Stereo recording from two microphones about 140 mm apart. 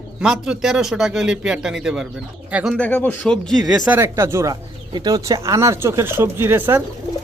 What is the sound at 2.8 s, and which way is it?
Speech, 10° left (ahead or behind).